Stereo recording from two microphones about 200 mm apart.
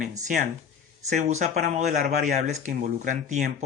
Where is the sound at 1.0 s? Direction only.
35° right (ahead or behind).